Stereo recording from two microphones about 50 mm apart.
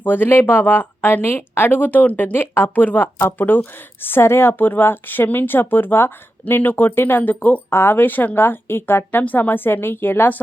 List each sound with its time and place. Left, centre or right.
0.0 s speech: left
7.7 s speech: left
9.2 s speech: left